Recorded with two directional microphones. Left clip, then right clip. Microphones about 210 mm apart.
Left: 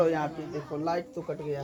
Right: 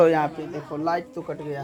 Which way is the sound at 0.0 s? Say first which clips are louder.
Right 8 dB; 45° right (ahead or behind).